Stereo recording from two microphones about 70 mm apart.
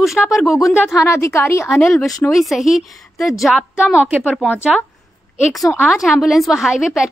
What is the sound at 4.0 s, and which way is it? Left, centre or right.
Speech, centre.